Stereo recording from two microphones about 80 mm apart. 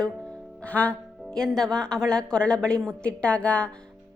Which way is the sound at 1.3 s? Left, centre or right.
Centre.